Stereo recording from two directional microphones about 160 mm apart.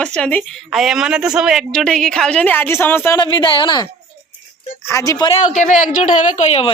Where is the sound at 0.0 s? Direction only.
5° left (ahead or behind).